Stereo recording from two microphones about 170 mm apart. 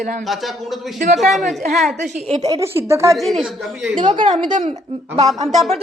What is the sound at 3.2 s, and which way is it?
Speech, centre (ahead or behind).